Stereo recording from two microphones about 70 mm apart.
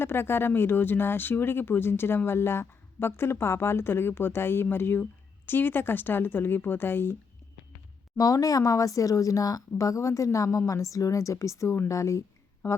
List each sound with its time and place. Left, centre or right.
0.0 s speech: left
8.2 s speech: left